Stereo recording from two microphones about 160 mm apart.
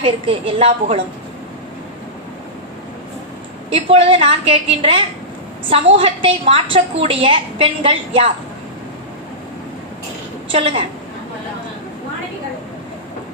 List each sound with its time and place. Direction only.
0.0 s a woman's voice: 35° right (ahead or behind)
3.7 s a woman's voice: 35° right (ahead or behind)
10.5 s a woman's voice: 35° right (ahead or behind)